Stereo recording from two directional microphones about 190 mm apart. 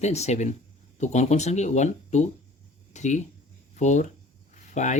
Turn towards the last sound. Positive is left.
turn(degrees=40)  # may be behind; listen again after turning